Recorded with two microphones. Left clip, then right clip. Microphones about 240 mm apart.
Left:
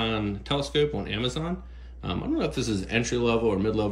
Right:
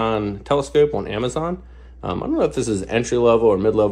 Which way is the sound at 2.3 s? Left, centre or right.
Centre.